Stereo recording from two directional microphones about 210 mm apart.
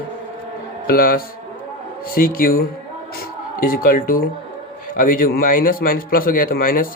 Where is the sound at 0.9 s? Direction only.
45° left (ahead or behind).